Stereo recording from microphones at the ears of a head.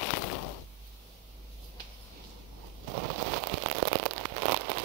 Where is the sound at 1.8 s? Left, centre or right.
Right.